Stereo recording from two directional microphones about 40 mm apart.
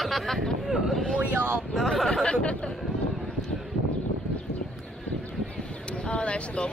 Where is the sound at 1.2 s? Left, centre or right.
Right.